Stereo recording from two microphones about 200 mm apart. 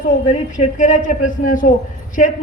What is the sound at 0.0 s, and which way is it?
A man's voice, 40° left (ahead or behind).